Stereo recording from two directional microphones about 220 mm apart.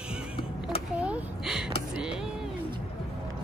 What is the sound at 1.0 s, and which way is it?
Gasp, 5° right (ahead or behind).